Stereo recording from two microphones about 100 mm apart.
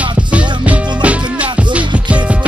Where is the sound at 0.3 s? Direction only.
15° right (ahead or behind).